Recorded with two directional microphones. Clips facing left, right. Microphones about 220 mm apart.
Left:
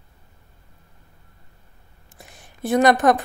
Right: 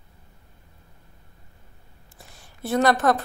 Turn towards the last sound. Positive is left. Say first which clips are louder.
# left 4 dB
turn(degrees=15)  # may be behind; listen again after turning